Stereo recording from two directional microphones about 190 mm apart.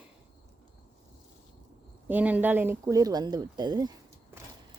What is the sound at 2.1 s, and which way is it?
Speech, 10° right (ahead or behind).